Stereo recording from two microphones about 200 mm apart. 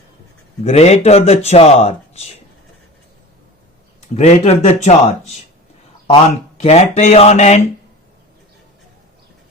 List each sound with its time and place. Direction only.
0.6 s speech: 30° left (ahead or behind)
4.1 s speech: 30° left (ahead or behind)
6.6 s speech: 35° left (ahead or behind)